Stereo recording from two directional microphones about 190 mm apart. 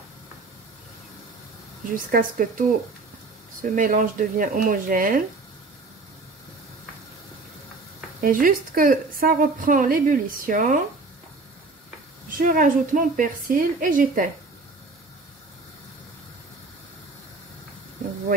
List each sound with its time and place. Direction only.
1.9 s a woman's voice: 45° right (ahead or behind)
3.6 s a woman's voice: 45° right (ahead or behind)
8.2 s a woman's voice: 45° right (ahead or behind)
12.3 s a woman's voice: 45° right (ahead or behind)